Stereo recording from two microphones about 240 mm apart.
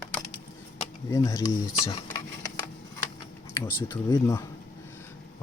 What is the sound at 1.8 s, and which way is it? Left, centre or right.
Speech, left.